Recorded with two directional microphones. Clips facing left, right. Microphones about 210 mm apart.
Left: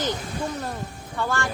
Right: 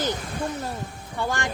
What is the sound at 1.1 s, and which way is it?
Speech, 15° right (ahead or behind).